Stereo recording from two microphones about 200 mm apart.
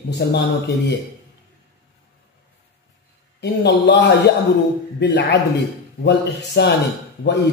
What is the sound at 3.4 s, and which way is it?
A man's voice, 55° left (ahead or behind).